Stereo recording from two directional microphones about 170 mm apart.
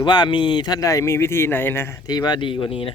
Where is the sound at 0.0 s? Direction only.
25° left (ahead or behind).